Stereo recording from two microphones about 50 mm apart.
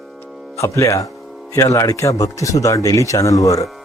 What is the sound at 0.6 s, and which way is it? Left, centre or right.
Speech, left.